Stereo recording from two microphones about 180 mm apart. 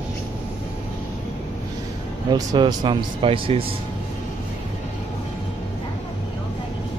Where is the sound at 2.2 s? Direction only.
25° right (ahead or behind).